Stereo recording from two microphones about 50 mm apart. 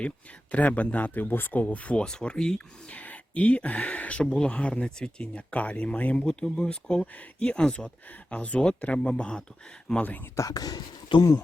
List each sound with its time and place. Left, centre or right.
0.5 s speech: left
1.7 s speech: left
2.9 s speech: left
6.2 s speech: centre
9.9 s speech: centre
10.4 s speech: left